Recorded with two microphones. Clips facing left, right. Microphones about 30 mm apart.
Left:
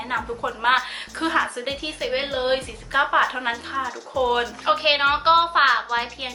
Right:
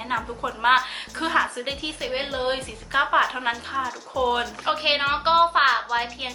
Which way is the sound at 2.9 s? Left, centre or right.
Centre.